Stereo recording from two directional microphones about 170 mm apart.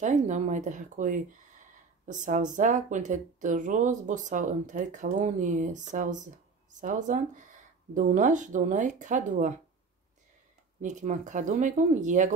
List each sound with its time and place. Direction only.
0.0 s speech: 45° right (ahead or behind)
10.8 s speech: 45° right (ahead or behind)